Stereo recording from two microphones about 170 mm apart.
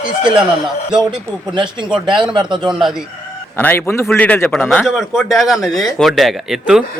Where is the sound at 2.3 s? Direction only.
25° right (ahead or behind).